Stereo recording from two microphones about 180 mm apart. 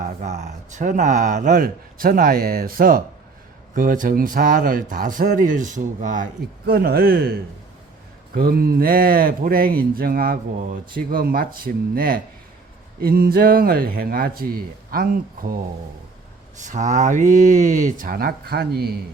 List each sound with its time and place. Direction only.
0.0 s speech: 40° right (ahead or behind)
6.7 s speech: 60° right (ahead or behind)
8.4 s speech: 55° right (ahead or behind)
16.6 s speech: 40° right (ahead or behind); by 18.9 s 60° right (ahead or behind)